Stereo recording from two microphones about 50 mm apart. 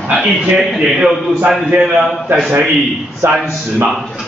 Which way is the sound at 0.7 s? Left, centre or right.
Centre.